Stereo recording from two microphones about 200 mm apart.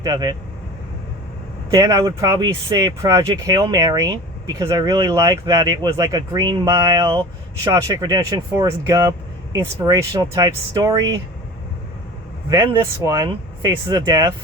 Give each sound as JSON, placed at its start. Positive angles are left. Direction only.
{"t": 0.0, "sound": "speech", "side_deg": -20}
{"t": 1.7, "sound": "speech", "side_deg": -20}
{"t": 12.5, "sound": "speech", "side_deg": -15}